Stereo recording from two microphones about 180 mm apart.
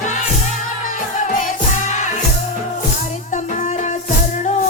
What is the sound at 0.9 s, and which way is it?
Music, 45° left (ahead or behind).